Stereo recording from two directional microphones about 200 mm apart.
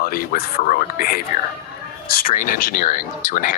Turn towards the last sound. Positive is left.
turn(degrees=40)  # may be behind; listen again after turning